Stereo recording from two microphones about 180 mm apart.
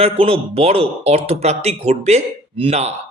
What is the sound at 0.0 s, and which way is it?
Speech, 35° right (ahead or behind).